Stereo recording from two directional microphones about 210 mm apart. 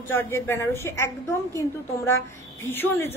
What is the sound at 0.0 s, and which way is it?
A woman's voice, 10° left (ahead or behind).